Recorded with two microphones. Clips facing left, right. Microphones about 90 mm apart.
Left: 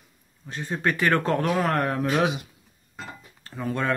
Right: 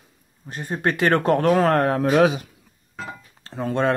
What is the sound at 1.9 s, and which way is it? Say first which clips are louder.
Speech: right 6 dB; 40° right (ahead or behind).